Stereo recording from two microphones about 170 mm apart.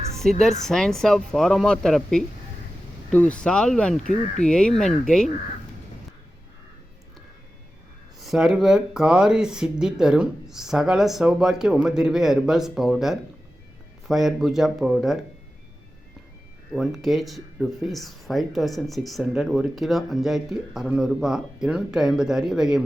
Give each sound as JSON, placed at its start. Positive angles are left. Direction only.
{"t": 0.2, "sound": "speech", "side_deg": 0}
{"t": 4.0, "sound": "speech", "side_deg": 45}
{"t": 4.4, "sound": "speech", "side_deg": 5}
{"t": 8.2, "sound": "speech", "side_deg": 0}
{"t": 16.7, "sound": "speech", "side_deg": 0}